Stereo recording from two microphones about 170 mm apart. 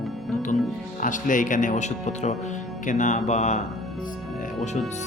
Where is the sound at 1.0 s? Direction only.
50° left (ahead or behind).